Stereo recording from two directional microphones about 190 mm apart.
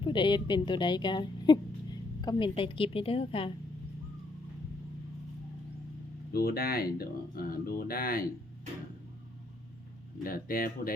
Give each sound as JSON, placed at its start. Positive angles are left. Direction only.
{"t": 0.0, "sound": "a woman's voice", "side_deg": 25}
{"t": 6.3, "sound": "speech", "side_deg": 55}
{"t": 10.2, "sound": "speech", "side_deg": 50}